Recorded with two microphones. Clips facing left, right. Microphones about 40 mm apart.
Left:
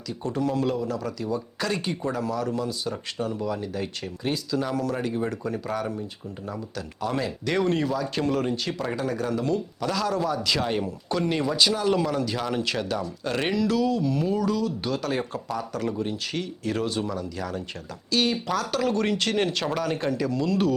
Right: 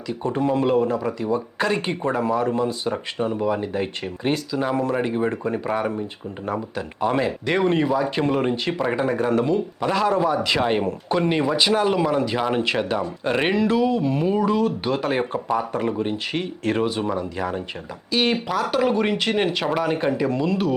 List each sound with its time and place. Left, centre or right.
0.1 s speech: right
17.0 s speech: right
18.1 s speech: centre